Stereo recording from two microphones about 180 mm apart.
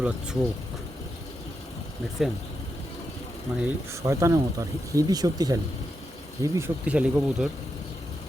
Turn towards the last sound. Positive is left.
turn(degrees=-5)  # may be behind; listen again after turning